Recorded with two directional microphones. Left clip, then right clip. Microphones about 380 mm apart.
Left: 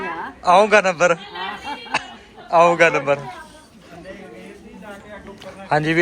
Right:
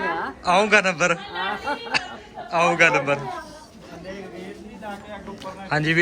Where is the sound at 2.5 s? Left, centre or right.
Centre.